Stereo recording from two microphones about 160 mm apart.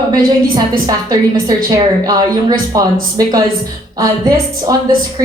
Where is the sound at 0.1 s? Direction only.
25° right (ahead or behind).